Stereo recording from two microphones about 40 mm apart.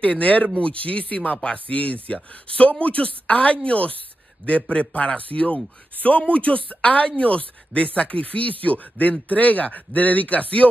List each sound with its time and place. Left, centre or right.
0.0 s speech: left